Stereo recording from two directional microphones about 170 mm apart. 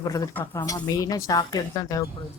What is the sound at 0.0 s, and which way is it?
Speech, 20° left (ahead or behind).